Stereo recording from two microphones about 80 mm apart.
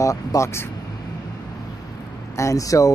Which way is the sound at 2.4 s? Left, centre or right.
Left.